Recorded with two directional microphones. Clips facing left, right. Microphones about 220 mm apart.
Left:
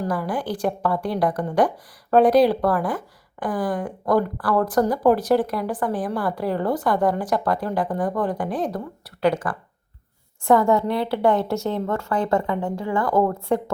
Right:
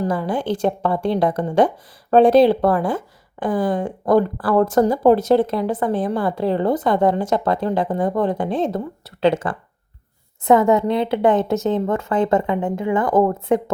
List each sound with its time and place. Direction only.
0.0 s speech: 25° right (ahead or behind)